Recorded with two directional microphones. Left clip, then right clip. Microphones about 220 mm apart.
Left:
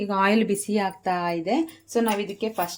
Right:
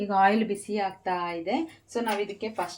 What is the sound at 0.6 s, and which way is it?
Speech, 50° left (ahead or behind).